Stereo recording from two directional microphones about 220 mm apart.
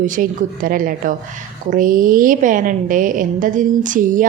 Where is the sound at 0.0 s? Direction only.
40° right (ahead or behind).